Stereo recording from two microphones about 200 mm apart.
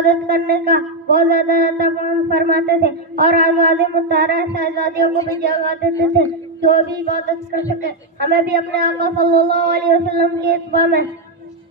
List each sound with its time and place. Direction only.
0.0 s speech: 50° right (ahead or behind)
4.9 s speech: 15° left (ahead or behind)
5.4 s speech: 50° right (ahead or behind)
7.8 s speech: 50° right (ahead or behind)